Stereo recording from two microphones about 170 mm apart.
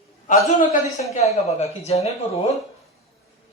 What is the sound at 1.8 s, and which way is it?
Speech, 40° left (ahead or behind).